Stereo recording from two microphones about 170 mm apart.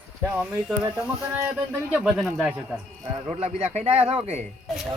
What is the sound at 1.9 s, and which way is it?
Speech, 5° right (ahead or behind).